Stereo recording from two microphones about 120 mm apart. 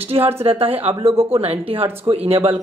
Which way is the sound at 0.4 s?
50° right (ahead or behind).